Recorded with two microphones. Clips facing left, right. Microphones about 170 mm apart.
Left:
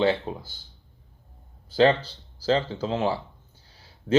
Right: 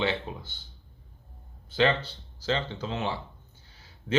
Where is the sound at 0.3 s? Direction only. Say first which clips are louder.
Left 5 dB; 40° left (ahead or behind).